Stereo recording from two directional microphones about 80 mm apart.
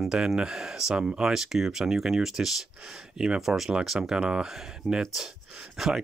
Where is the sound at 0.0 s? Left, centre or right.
Centre.